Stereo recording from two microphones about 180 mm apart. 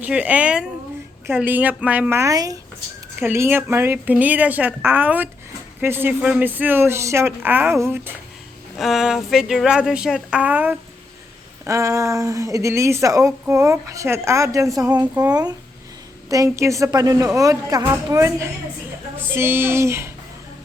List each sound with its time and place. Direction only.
0.0 s speech: 10° right (ahead or behind)
8.8 s a woman's voice: centre (ahead or behind)